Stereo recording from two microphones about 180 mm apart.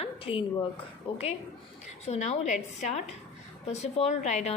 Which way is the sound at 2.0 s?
40° left (ahead or behind).